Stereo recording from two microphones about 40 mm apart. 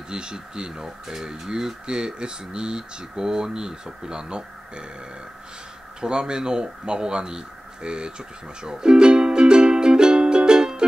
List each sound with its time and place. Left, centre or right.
0.1 s speech: right
5.9 s speech: right